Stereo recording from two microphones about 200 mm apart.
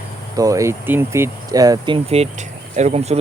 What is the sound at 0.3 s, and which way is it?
Speech, 15° right (ahead or behind).